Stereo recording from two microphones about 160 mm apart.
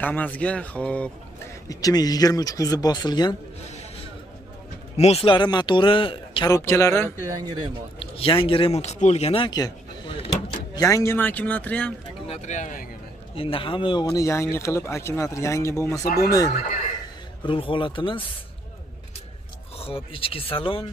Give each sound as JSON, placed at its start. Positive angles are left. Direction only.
{"t": 0.0, "sound": "a man's voice", "side_deg": 10}
{"t": 1.7, "sound": "speech", "side_deg": 20}
{"t": 4.9, "sound": "speech", "side_deg": 40}
{"t": 6.5, "sound": "a man's voice", "side_deg": 20}
{"t": 8.0, "sound": "speech", "side_deg": 35}
{"t": 10.7, "sound": "a man's voice", "side_deg": 20}
{"t": 12.3, "sound": "speech", "side_deg": 50}
{"t": 13.3, "sound": "speech", "side_deg": 35}
{"t": 19.8, "sound": "speech", "side_deg": 35}